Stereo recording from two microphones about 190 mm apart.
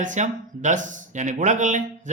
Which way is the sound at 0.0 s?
40° right (ahead or behind).